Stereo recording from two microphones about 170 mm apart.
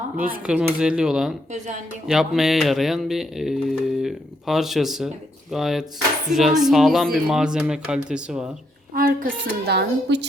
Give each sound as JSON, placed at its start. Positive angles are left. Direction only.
{"t": 0.2, "sound": "speech", "side_deg": -10}
{"t": 8.9, "sound": "a woman's voice", "side_deg": -55}